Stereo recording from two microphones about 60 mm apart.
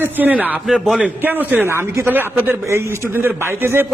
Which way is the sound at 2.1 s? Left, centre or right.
Right.